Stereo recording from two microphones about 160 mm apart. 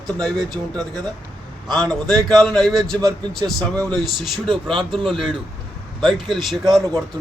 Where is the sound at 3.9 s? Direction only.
Centre (ahead or behind).